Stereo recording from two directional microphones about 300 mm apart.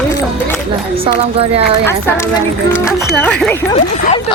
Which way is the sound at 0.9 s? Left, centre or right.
Centre.